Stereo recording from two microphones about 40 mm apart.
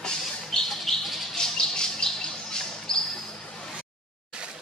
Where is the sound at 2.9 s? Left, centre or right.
Centre.